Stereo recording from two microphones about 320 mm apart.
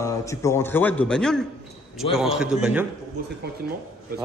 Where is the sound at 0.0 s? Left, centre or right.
Centre.